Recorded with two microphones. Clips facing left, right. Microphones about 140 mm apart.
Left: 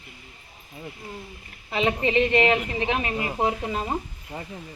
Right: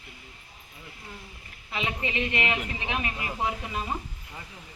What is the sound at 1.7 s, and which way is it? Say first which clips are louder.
A woman's voice: left 9 dB; 30° left (ahead or behind).